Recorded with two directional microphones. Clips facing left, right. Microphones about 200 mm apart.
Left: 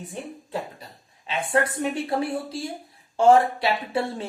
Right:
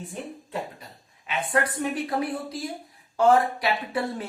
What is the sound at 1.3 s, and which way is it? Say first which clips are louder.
Speech: left 2 dB; 30° left (ahead or behind).